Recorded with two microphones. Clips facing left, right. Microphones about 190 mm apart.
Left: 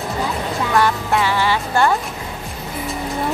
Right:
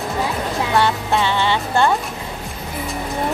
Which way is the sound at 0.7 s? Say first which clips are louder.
Left 1 dB; 25° right (ahead or behind).